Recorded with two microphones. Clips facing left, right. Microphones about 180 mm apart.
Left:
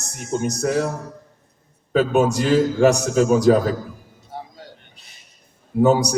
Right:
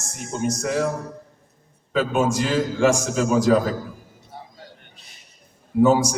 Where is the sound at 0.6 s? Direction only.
45° left (ahead or behind).